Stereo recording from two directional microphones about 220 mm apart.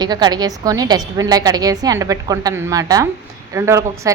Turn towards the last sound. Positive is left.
turn(degrees=-15)  # may be behind; listen again after turning